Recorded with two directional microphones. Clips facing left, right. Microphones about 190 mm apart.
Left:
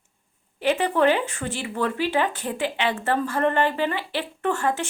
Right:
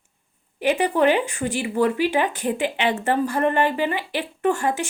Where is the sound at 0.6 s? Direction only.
15° right (ahead or behind).